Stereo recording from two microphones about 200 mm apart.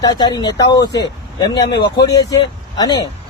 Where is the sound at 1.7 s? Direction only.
55° left (ahead or behind).